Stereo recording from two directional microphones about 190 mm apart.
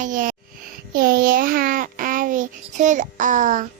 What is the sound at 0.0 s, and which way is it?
Music, 45° right (ahead or behind).